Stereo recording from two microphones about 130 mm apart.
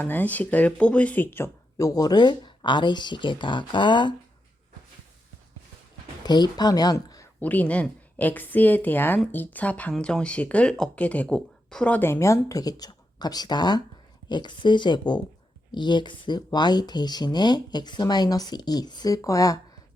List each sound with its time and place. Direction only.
0.0 s speech: 15° left (ahead or behind)
1.9 s speech: 30° left (ahead or behind)
6.2 s speech: 35° left (ahead or behind)
7.3 s speech: 15° left (ahead or behind)